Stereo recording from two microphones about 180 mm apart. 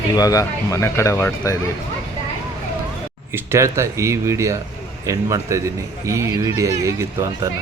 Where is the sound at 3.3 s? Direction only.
15° right (ahead or behind).